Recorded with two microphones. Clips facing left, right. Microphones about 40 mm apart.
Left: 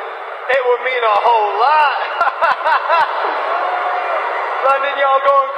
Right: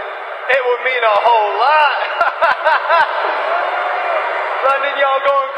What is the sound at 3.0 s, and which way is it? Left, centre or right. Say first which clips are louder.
A man's voice: right 1 dB; right.